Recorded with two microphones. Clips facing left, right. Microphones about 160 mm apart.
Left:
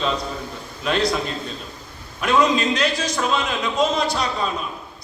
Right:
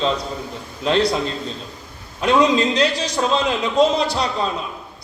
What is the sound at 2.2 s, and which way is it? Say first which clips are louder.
A man's voice: right 3 dB; 25° right (ahead or behind).